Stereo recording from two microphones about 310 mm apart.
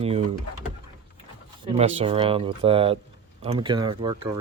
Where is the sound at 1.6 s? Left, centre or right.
Centre.